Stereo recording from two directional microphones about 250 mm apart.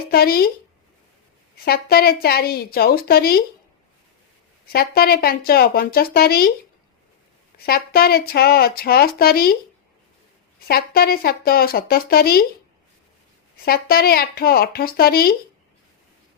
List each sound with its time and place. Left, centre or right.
0.1 s speech: left
1.6 s speech: left
4.7 s speech: left
7.6 s speech: left
10.7 s speech: left
13.7 s speech: left